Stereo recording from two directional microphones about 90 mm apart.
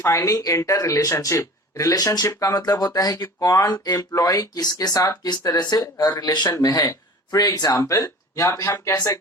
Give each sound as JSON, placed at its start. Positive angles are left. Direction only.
{"t": 0.0, "sound": "speech", "side_deg": 35}